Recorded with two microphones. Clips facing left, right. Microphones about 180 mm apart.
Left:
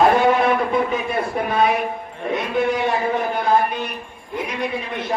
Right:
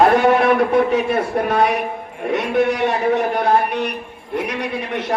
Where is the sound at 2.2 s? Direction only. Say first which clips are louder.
Right 3 dB; 70° right (ahead or behind).